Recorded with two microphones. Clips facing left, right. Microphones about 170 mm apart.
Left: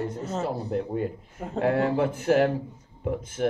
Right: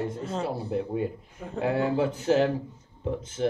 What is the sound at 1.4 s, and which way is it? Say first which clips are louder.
Speech: left 3 dB; 55° left (ahead or behind).